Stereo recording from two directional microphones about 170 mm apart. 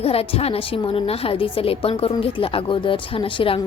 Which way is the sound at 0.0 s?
35° left (ahead or behind).